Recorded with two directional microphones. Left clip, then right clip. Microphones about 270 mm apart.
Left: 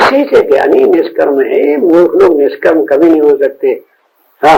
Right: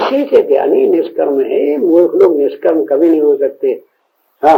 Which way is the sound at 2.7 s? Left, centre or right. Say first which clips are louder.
Left 3 dB; right.